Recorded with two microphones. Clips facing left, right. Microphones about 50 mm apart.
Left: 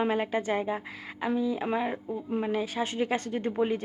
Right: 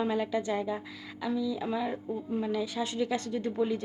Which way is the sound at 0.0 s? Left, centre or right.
Left.